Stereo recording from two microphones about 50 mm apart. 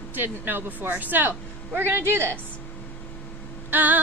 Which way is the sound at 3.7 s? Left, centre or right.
Right.